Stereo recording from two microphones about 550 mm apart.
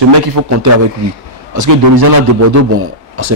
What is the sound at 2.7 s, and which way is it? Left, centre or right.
Speech, right.